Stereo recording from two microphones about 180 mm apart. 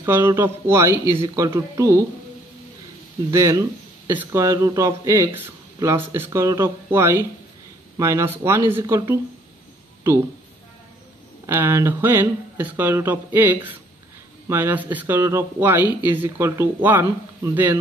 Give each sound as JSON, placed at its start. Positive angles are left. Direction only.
{"t": 0.0, "sound": "speech", "side_deg": -10}
{"t": 3.3, "sound": "speech", "side_deg": -15}
{"t": 11.4, "sound": "speech", "side_deg": -15}